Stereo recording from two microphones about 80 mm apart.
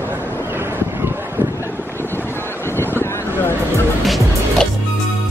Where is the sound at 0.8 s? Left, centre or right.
Right.